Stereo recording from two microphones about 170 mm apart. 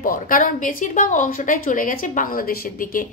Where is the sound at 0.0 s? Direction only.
55° left (ahead or behind).